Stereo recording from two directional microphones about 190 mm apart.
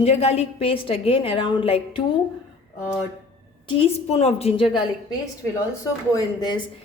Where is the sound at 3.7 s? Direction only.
30° left (ahead or behind).